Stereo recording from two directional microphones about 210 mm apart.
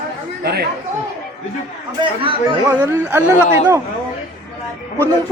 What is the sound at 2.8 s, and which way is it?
Speech, 10° right (ahead or behind).